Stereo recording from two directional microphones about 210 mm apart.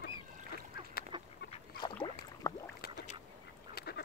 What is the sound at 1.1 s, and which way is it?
Chicken, 20° right (ahead or behind).